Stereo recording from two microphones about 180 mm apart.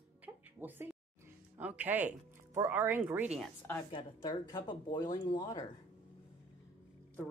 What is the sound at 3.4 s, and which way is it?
Speech, 10° left (ahead or behind).